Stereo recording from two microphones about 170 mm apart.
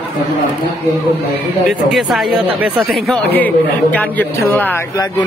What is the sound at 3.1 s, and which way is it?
Speech, 10° left (ahead or behind).